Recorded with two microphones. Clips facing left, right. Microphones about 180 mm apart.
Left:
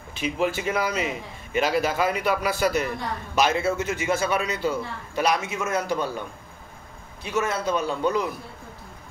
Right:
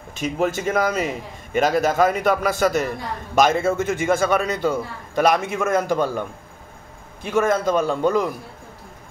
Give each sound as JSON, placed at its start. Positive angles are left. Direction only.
{"t": 0.1, "sound": "a man's voice", "side_deg": -45}
{"t": 7.2, "sound": "a man's voice", "side_deg": -50}